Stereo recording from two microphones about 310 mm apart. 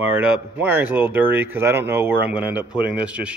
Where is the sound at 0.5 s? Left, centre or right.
Centre.